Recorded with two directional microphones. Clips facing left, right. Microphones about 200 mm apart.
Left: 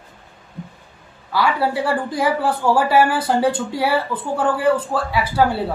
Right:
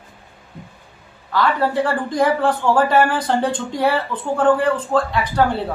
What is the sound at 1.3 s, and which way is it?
Speech, 10° left (ahead or behind).